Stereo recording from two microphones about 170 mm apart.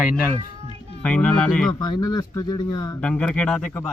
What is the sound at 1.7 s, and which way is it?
Speech, 25° left (ahead or behind).